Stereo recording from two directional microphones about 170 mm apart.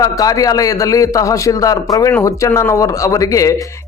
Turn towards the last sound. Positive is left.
turn(degrees=20)  # may be behind; listen again after turning